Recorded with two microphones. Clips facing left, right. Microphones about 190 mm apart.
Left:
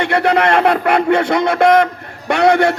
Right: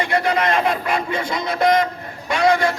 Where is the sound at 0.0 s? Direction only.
65° left (ahead or behind).